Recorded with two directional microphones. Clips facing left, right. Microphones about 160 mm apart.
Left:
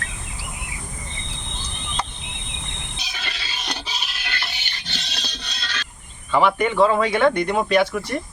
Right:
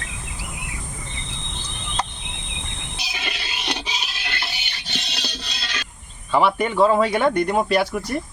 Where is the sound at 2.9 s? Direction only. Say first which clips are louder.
Right 5 dB; 5° right (ahead or behind).